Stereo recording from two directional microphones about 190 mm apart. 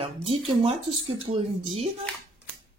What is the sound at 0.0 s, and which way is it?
Speech, 30° right (ahead or behind).